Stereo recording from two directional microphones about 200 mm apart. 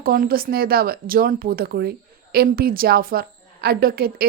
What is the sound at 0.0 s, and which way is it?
A woman's voice, 45° right (ahead or behind).